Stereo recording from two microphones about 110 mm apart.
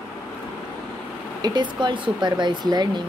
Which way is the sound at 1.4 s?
45° right (ahead or behind).